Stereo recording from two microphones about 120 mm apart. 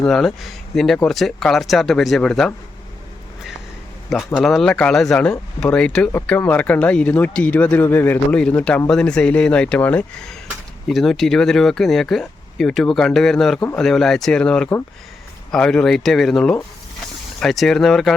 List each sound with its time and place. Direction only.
0.0 s speech: 5° left (ahead or behind)
4.3 s speech: 5° left (ahead or behind)
8.4 s speech: 10° left (ahead or behind)
10.8 s speech: centre (ahead or behind)